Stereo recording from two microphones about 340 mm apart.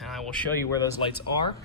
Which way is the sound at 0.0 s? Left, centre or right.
Centre.